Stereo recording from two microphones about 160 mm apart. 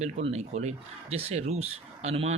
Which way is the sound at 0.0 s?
40° right (ahead or behind).